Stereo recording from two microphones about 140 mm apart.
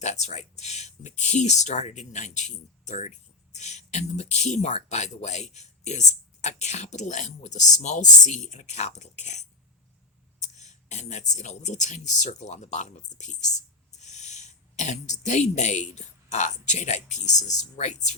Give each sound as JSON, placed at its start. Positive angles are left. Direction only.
{"t": 0.0, "sound": "speech", "side_deg": 55}
{"t": 10.4, "sound": "speech", "side_deg": 55}